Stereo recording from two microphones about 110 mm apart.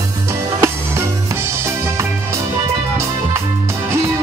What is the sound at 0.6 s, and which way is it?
Music, 25° right (ahead or behind).